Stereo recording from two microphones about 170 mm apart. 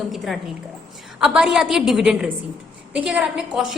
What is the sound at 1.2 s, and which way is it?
A woman's voice, 5° right (ahead or behind).